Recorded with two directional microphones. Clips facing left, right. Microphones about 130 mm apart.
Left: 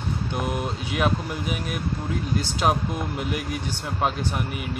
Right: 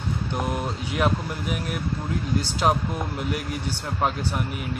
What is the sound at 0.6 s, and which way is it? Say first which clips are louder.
Speech: even; 10° left (ahead or behind).